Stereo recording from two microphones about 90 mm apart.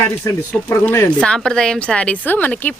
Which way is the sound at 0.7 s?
25° left (ahead or behind).